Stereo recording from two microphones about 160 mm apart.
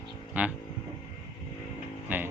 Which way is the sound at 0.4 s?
10° right (ahead or behind).